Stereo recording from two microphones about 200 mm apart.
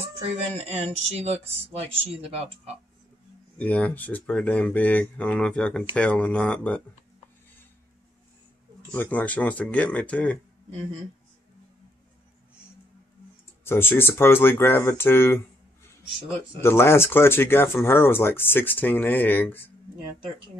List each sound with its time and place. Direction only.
0.6 s speech: 30° right (ahead or behind)
3.5 s speech: 10° left (ahead or behind)
8.9 s speech: 10° left (ahead or behind)
13.7 s speech: 10° left (ahead or behind)
16.6 s speech: 10° left (ahead or behind)